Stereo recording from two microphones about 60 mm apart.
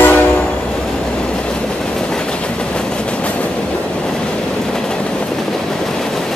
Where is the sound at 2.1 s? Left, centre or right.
Centre.